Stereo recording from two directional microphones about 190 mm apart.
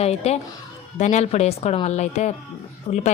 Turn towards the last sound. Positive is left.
turn(degrees=30)  # may be behind; listen again after turning